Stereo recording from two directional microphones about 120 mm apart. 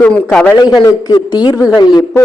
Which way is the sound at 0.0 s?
5° left (ahead or behind).